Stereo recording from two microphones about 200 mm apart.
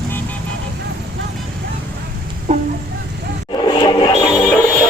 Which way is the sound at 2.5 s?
35° right (ahead or behind).